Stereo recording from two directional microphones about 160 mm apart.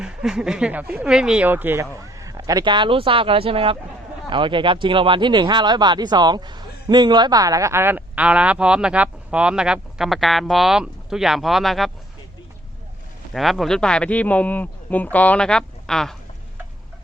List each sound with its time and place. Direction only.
0.0 s speech: 5° right (ahead or behind)
13.3 s speech: centre (ahead or behind)